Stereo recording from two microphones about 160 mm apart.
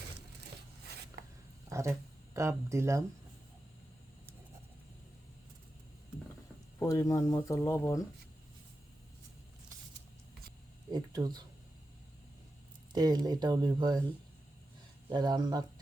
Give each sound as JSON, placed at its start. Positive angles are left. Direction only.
{"t": 1.7, "sound": "speech", "side_deg": -20}
{"t": 6.7, "sound": "speech", "side_deg": 20}
{"t": 10.9, "sound": "speech", "side_deg": -25}
{"t": 12.9, "sound": "speech", "side_deg": -25}
{"t": 15.1, "sound": "speech", "side_deg": -25}